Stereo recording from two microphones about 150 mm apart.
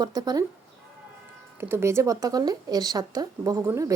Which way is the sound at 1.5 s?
15° right (ahead or behind).